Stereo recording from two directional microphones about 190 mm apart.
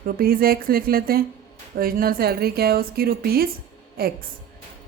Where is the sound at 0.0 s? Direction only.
50° right (ahead or behind).